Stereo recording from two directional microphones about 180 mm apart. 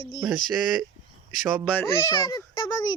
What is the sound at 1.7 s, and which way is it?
Speech, 15° left (ahead or behind).